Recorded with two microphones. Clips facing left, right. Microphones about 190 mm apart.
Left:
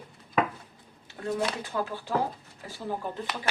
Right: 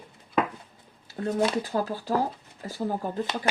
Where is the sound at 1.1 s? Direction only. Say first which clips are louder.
Right 10 dB; 40° right (ahead or behind).